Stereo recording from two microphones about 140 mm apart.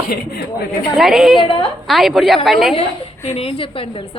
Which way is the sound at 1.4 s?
35° left (ahead or behind).